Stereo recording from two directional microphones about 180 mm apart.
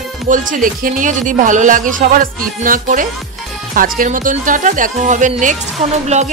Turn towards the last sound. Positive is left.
turn(degrees=-40)  # may be behind; listen again after turning